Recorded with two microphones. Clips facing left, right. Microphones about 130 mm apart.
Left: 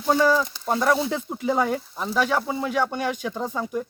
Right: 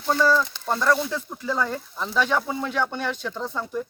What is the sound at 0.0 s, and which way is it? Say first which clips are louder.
Speech: left 1 dB; 10° left (ahead or behind).